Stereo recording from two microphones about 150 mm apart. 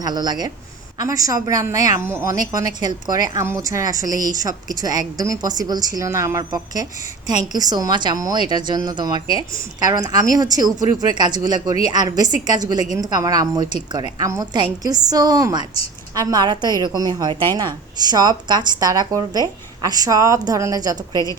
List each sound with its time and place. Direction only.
0.0 s a woman's voice: 25° right (ahead or behind)